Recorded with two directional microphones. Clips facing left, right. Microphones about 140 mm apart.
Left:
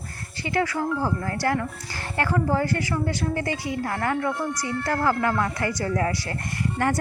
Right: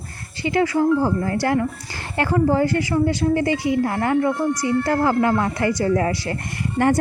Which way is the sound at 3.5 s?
75° right (ahead or behind).